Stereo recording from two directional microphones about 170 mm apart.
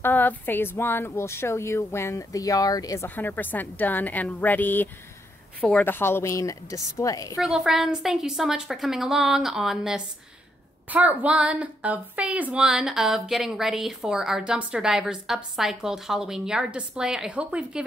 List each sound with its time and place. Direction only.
0.0 s speech: 10° left (ahead or behind)
7.3 s speech: centre (ahead or behind)